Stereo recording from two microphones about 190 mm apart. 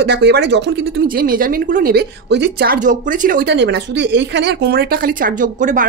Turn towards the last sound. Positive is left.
turn(degrees=-45)  # may be behind; listen again after turning